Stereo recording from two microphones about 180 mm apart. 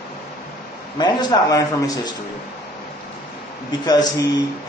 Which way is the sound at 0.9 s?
25° left (ahead or behind).